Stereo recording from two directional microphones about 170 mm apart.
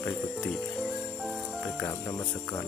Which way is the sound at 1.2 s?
Centre (ahead or behind).